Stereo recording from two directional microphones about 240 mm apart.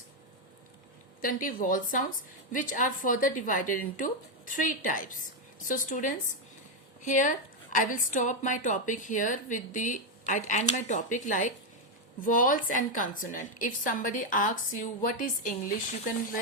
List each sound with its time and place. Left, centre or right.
1.2 s a woman's voice: left